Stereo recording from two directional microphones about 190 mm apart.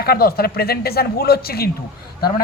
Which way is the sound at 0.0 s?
55° left (ahead or behind).